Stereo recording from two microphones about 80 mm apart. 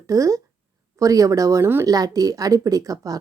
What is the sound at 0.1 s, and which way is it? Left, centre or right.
Speech, right.